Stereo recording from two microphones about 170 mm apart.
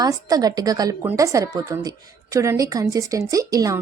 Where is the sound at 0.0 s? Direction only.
20° right (ahead or behind).